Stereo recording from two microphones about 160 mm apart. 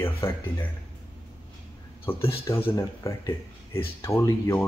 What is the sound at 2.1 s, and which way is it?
Speech, 15° left (ahead or behind).